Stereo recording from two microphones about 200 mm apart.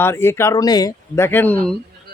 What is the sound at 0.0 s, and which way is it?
Speech, 10° left (ahead or behind).